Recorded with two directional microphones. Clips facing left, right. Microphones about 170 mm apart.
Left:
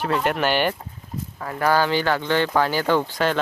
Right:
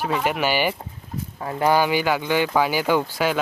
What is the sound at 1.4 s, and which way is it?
Speech, 20° right (ahead or behind).